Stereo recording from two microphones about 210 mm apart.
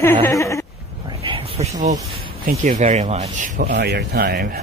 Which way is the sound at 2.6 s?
35° right (ahead or behind).